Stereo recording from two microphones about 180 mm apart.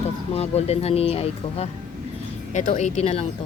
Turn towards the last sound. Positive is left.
turn(degrees=35)  # may be behind; listen again after turning